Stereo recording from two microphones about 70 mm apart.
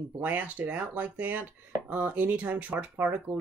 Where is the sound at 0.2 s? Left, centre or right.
Right.